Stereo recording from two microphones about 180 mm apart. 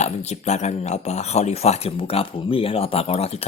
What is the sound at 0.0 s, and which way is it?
Speech, 40° left (ahead or behind).